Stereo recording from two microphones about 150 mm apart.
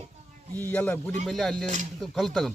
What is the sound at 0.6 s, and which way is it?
Speech, 10° left (ahead or behind).